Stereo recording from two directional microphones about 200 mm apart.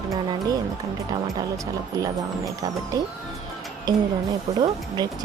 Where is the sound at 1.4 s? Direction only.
15° right (ahead or behind).